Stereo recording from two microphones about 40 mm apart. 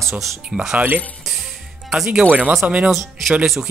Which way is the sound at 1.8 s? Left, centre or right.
Centre.